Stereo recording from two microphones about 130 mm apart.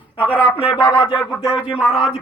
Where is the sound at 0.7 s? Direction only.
35° left (ahead or behind).